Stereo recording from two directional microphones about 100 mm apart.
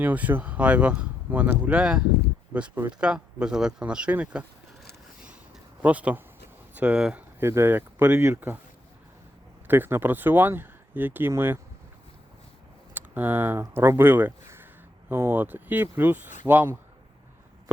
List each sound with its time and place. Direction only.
0.0 s speech: 15° right (ahead or behind)
5.8 s speech: 15° right (ahead or behind)
7.3 s speech: 25° right (ahead or behind)
9.6 s speech: 20° right (ahead or behind)
12.9 s speech: 20° right (ahead or behind)